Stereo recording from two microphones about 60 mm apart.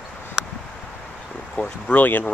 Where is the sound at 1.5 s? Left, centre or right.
Left.